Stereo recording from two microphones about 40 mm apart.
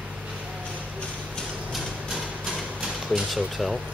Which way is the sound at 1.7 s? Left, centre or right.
Centre.